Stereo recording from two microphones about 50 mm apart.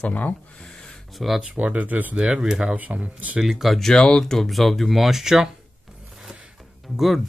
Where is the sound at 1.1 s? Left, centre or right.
Centre.